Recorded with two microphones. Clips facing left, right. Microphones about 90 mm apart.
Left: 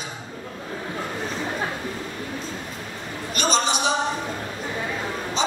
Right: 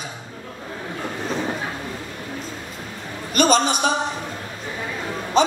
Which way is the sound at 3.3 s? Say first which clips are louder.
Right 5 dB; 50° right (ahead or behind).